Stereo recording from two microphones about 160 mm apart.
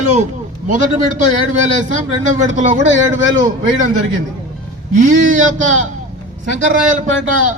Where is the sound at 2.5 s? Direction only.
45° right (ahead or behind).